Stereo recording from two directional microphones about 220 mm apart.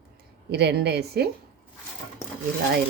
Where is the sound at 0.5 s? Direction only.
50° right (ahead or behind).